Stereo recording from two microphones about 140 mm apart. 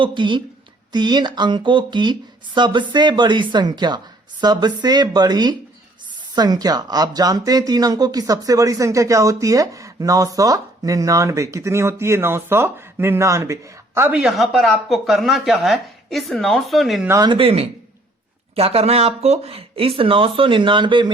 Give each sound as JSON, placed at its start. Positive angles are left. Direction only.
{"t": 0.0, "sound": "a woman's voice", "side_deg": -35}
{"t": 17.1, "sound": "speech", "side_deg": -25}
{"t": 17.3, "sound": "a woman's voice", "side_deg": -40}